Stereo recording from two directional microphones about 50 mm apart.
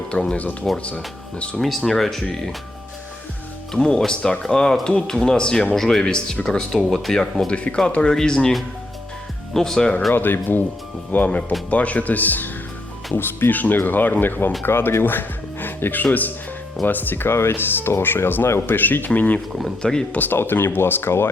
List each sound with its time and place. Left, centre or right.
0.1 s speech: centre
1.6 s speech: centre
3.7 s speech: centre
7.5 s speech: left
8.1 s speech: centre
10.1 s speech: left
11.1 s speech: left
13.1 s speech: left
19.8 s speech: centre
20.1 s speech: left